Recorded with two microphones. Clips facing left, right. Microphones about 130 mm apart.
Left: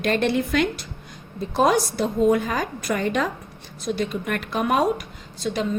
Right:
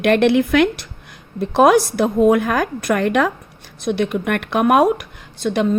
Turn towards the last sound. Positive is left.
turn(degrees=-60)  # may be behind; listen again after turning